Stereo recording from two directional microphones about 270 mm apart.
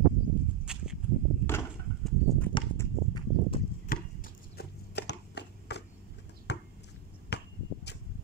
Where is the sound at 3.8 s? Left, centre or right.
Left.